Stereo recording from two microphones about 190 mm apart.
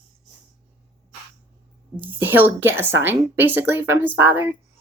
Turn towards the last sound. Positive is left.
turn(degrees=-10)  # may be behind; listen again after turning